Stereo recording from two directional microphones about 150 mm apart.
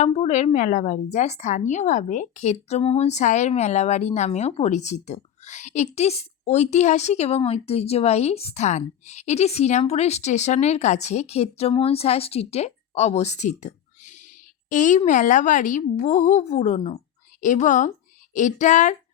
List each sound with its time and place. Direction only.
0.0 s a woman's voice: 45° left (ahead or behind)
17.4 s a woman's voice: 55° left (ahead or behind)